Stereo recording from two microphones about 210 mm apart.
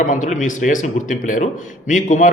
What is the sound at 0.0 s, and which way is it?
Speech, 35° left (ahead or behind).